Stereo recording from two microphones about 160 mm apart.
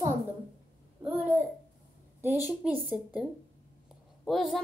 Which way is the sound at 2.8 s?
Centre (ahead or behind).